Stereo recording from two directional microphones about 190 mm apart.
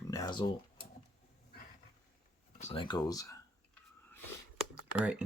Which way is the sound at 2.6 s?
30° left (ahead or behind).